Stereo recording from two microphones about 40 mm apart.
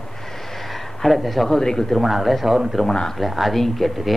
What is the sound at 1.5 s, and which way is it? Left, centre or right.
Speech, centre.